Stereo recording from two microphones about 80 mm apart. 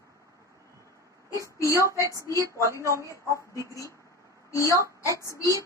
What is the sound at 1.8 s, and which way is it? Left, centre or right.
Speech, right.